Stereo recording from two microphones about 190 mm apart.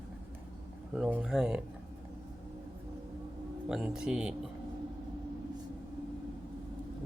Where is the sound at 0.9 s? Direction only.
5° right (ahead or behind).